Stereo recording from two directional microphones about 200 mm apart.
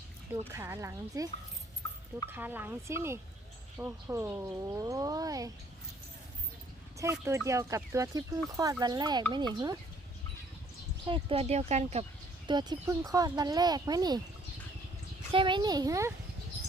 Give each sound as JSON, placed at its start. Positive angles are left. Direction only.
{"t": 0.5, "sound": "speech", "side_deg": -10}
{"t": 2.3, "sound": "speech", "side_deg": -10}
{"t": 7.0, "sound": "speech", "side_deg": -15}
{"t": 11.0, "sound": "speech", "side_deg": -25}
{"t": 12.5, "sound": "speech", "side_deg": -20}
{"t": 15.3, "sound": "speech", "side_deg": -25}